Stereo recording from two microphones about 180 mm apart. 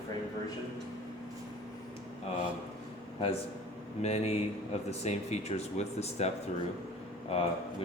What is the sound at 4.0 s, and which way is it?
Speech, 35° left (ahead or behind).